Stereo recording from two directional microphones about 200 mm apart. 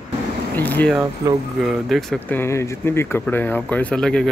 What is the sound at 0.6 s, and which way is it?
Speech, 10° left (ahead or behind).